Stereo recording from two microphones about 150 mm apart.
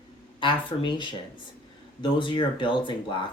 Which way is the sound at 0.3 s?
35° left (ahead or behind).